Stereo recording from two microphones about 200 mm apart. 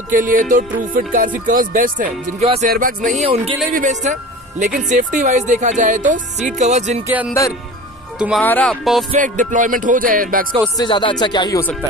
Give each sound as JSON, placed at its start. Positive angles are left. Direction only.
{"t": 0.1, "sound": "music", "side_deg": -45}
{"t": 2.4, "sound": "speech", "side_deg": -30}
{"t": 2.7, "sound": "music", "side_deg": -45}
{"t": 3.2, "sound": "speech", "side_deg": -30}
{"t": 8.2, "sound": "music", "side_deg": -5}
{"t": 9.1, "sound": "music", "side_deg": -40}
{"t": 10.8, "sound": "speech", "side_deg": 25}